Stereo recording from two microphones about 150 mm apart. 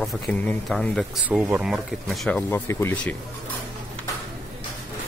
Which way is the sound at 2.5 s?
15° left (ahead or behind).